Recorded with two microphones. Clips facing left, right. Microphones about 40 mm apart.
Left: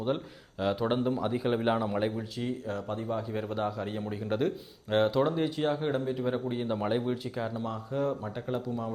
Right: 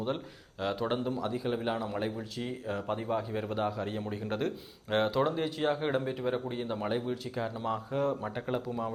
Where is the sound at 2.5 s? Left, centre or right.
Centre.